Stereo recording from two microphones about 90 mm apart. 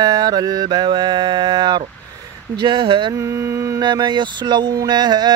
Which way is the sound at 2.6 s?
65° right (ahead or behind).